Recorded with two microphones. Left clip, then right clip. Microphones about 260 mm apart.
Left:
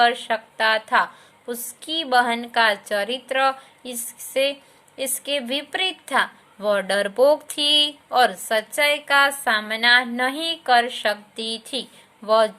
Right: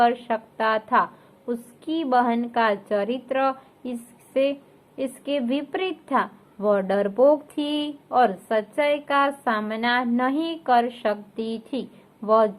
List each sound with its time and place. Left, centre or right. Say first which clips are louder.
0.0 s a woman's voice: left 2 dB; left